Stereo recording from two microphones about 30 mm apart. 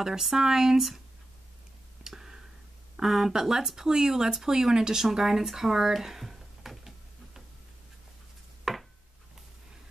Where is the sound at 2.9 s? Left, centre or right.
Centre.